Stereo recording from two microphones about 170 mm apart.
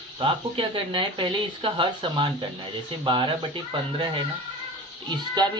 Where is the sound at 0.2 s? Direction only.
30° right (ahead or behind).